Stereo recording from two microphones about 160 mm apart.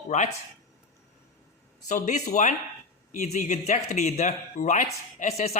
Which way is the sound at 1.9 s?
50° left (ahead or behind).